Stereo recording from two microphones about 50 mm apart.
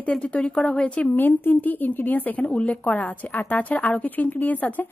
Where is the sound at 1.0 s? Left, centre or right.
Left.